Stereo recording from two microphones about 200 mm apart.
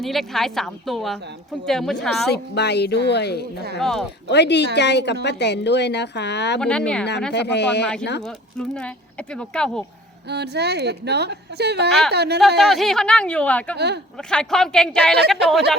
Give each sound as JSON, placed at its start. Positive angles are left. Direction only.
{"t": 0.0, "sound": "speech", "side_deg": 0}
{"t": 2.3, "sound": "speech", "side_deg": 55}
{"t": 3.8, "sound": "speech", "side_deg": 0}
{"t": 4.3, "sound": "speech", "side_deg": 60}
{"t": 6.6, "sound": "speech", "side_deg": 5}
{"t": 7.3, "sound": "speech", "side_deg": 60}
{"t": 8.2, "sound": "speech", "side_deg": 5}
{"t": 10.2, "sound": "a woman's voice", "side_deg": -55}
{"t": 12.5, "sound": "speech", "side_deg": 0}
{"t": 13.7, "sound": "a woman's voice", "side_deg": -55}
{"t": 14.2, "sound": "speech", "side_deg": 5}